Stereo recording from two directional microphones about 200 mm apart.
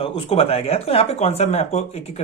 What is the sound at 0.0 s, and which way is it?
Speech, 30° left (ahead or behind).